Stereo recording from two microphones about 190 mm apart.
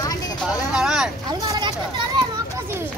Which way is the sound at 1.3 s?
20° right (ahead or behind).